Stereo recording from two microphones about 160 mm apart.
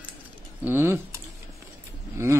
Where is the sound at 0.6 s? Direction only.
15° right (ahead or behind).